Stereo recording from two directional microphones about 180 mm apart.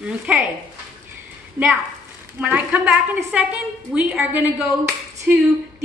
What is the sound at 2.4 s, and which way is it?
Speech, 5° right (ahead or behind).